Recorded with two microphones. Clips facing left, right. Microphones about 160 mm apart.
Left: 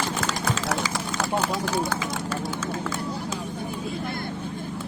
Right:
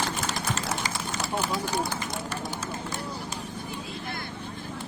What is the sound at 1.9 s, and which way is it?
Run, 90° left.